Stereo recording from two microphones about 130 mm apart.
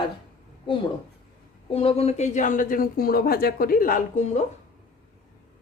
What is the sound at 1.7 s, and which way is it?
A woman's voice, 50° left (ahead or behind).